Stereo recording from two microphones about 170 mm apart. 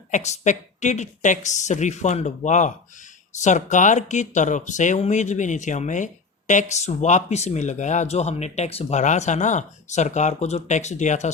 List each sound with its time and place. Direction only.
0.1 s speech: 45° left (ahead or behind)